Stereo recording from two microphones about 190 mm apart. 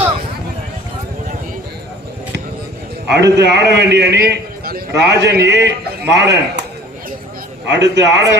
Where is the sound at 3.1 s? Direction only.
65° right (ahead or behind).